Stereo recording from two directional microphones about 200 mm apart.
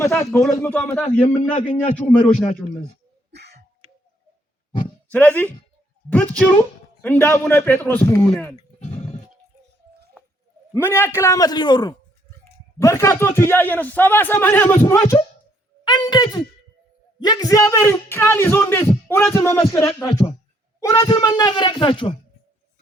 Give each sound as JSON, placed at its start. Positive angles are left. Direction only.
{"t": 0.0, "sound": "a man's voice", "side_deg": 15}
{"t": 0.3, "sound": "speech", "side_deg": 0}
{"t": 1.2, "sound": "a man's voice", "side_deg": 40}
{"t": 2.0, "sound": "speech", "side_deg": 5}
{"t": 3.3, "sound": "a sound", "side_deg": -55}
{"t": 5.1, "sound": "speech", "side_deg": 10}
{"t": 10.8, "sound": "speech", "side_deg": 10}